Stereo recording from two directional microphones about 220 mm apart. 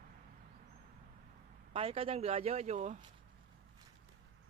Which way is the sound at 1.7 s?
25° right (ahead or behind).